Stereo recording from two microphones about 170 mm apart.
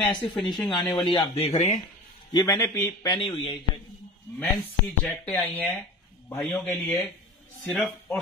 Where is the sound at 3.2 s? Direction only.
30° left (ahead or behind).